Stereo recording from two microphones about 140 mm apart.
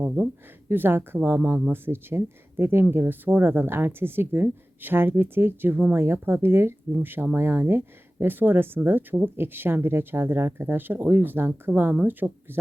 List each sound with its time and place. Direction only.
0.2 s speech: 15° right (ahead or behind)